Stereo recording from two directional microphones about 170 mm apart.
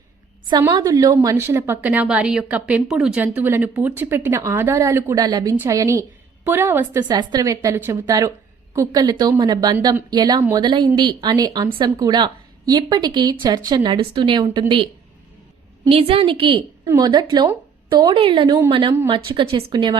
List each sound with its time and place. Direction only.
0.7 s a woman's voice: 20° right (ahead or behind)
7.1 s speech: 25° right (ahead or behind)
15.9 s a woman's voice: 35° right (ahead or behind)